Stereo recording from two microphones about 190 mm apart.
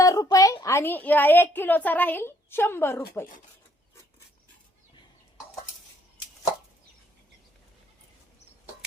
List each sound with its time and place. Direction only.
0.0 s a woman's voice: 20° left (ahead or behind)